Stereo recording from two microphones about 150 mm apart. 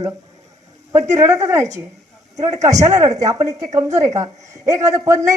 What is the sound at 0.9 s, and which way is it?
Speech, 50° right (ahead or behind).